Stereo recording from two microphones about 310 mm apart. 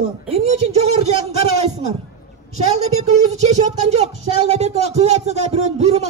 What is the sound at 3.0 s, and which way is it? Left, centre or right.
Speech, right.